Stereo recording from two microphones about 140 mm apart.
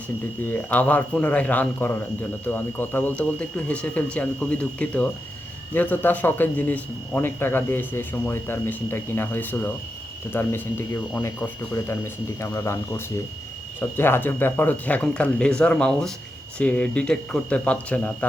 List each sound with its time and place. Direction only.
0.7 s a man's voice: 10° left (ahead or behind)